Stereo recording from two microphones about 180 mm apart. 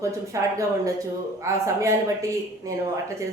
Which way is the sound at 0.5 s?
15° right (ahead or behind).